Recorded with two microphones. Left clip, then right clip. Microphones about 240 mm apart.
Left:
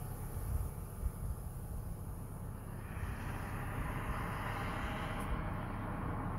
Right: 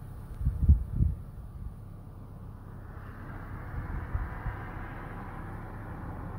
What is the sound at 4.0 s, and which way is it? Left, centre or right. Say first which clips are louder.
Vehicle: left 3 dB; left.